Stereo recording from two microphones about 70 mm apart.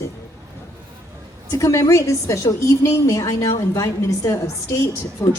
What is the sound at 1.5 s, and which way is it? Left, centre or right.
A woman's voice, left.